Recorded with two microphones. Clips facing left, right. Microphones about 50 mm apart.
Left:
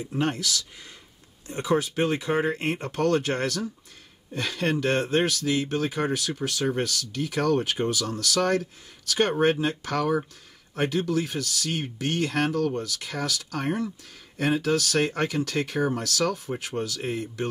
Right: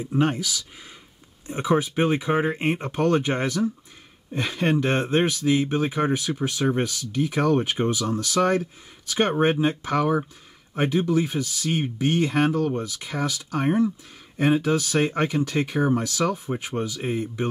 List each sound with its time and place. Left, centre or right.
0.1 s speech: centre